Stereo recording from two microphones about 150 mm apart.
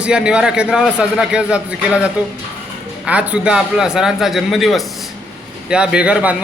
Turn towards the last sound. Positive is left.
turn(degrees=-10)  # may be behind; listen again after turning